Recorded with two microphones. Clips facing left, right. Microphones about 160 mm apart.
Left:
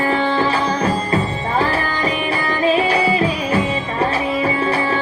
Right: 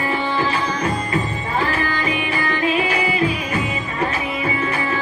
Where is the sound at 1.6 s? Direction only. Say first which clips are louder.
Left 2 dB; 35° left (ahead or behind).